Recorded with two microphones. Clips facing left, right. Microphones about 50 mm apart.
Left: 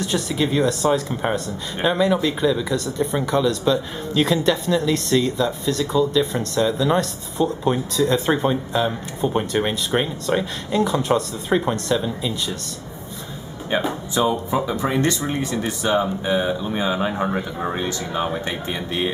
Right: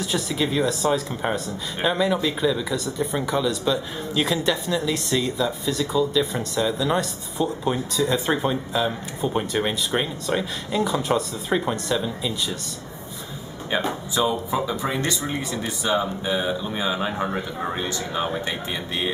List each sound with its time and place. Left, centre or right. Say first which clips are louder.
0.0 s speech: left 2 dB; centre
13.7 s speech: left 2 dB; centre
15.0 s speech: left 5 dB; left
15.9 s speech: left 3 dB; left
16.9 s speech: left 3 dB; centre